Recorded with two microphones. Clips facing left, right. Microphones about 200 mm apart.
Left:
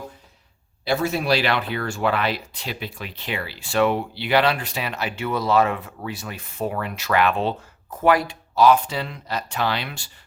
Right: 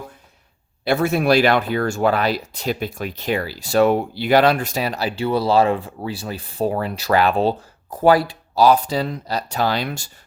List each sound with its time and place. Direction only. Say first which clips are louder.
0.9 s speech: right 4 dB; 55° right (ahead or behind)